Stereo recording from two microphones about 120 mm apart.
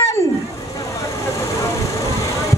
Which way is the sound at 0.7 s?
30° left (ahead or behind).